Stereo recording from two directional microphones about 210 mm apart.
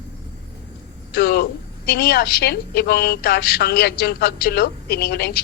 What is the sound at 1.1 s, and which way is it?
A woman's voice, 50° left (ahead or behind).